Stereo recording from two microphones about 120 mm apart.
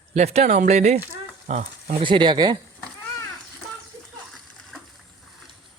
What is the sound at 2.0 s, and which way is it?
Speech, 45° right (ahead or behind).